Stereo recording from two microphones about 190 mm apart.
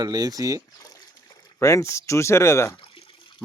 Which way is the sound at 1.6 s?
15° left (ahead or behind).